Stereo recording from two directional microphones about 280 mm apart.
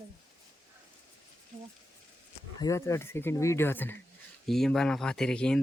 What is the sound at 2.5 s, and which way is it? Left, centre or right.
Speech, centre.